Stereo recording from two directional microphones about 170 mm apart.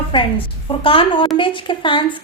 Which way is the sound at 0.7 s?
30° left (ahead or behind).